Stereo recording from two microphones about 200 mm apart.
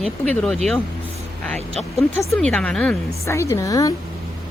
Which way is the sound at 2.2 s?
5° left (ahead or behind).